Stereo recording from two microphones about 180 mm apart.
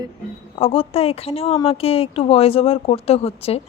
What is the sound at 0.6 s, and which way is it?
A woman's voice, 30° left (ahead or behind).